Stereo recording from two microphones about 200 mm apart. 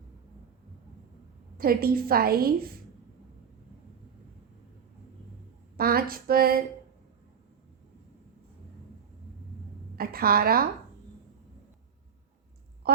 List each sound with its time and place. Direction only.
1.5 s a woman's voice: 50° right (ahead or behind)
5.7 s speech: 50° right (ahead or behind)
9.9 s a woman's voice: 50° right (ahead or behind)
12.8 s a sound: 50° right (ahead or behind)